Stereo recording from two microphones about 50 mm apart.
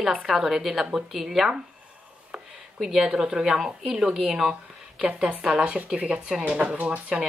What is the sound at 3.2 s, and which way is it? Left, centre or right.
Speech, centre.